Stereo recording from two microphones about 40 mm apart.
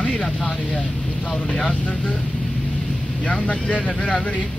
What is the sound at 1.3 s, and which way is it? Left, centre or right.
Speech, left.